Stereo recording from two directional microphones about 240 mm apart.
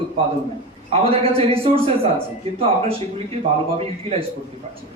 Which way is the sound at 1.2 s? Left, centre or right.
Right.